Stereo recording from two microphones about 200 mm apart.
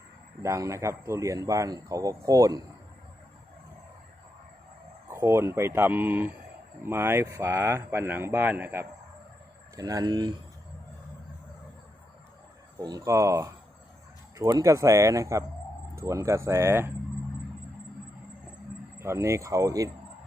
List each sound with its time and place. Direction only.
0.4 s speech: 15° right (ahead or behind)
5.0 s speech: 15° right (ahead or behind)
12.8 s speech: 15° right (ahead or behind)
18.9 s speech: 15° right (ahead or behind)